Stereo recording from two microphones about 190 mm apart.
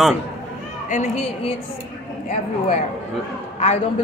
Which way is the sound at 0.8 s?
40° left (ahead or behind).